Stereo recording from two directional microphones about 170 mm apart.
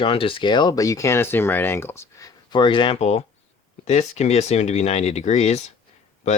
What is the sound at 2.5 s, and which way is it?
Speech, 30° left (ahead or behind).